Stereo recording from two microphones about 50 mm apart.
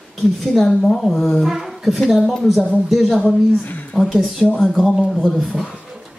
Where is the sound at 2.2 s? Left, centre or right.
Centre.